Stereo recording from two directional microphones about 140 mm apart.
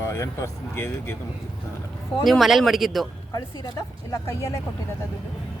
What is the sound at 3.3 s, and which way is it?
Speech, 25° left (ahead or behind).